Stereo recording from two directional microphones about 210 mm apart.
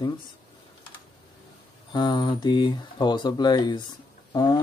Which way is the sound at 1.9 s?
20° left (ahead or behind).